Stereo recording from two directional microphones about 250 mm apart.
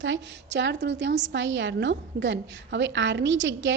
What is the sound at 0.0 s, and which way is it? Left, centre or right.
A woman's voice, right.